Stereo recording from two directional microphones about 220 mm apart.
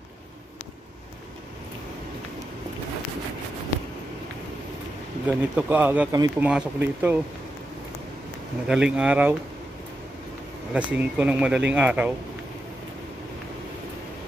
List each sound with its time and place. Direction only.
5.2 s speech: 5° right (ahead or behind)
8.6 s speech: 5° right (ahead or behind)
10.7 s speech: 5° right (ahead or behind)